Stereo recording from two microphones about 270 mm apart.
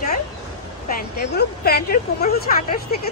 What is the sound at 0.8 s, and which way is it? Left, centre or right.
Speech, left.